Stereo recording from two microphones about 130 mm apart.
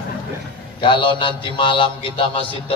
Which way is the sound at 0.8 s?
40° left (ahead or behind).